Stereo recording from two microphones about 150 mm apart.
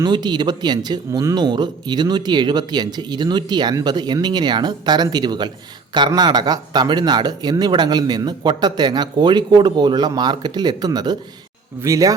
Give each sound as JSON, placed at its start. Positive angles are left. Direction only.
{"t": 0.0, "sound": "speech", "side_deg": -30}